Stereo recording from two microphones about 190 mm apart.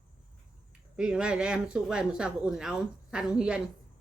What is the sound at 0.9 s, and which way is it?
Speech, 5° right (ahead or behind).